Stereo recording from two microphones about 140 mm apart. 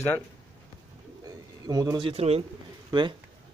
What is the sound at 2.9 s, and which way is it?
Speech, 35° right (ahead or behind).